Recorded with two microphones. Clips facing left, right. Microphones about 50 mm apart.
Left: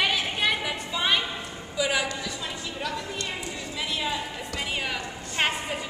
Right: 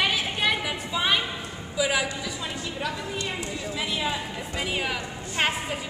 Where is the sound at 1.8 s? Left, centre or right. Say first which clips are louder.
Right 1 dB; centre.